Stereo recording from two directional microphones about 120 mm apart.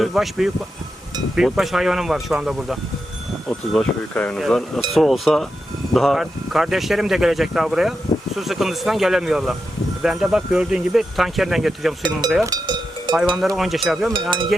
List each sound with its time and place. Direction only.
0.0 s speech: centre (ahead or behind)
12.5 s cowbell: 35° right (ahead or behind)
13.6 s speech: centre (ahead or behind)
14.1 s speech: 40° right (ahead or behind)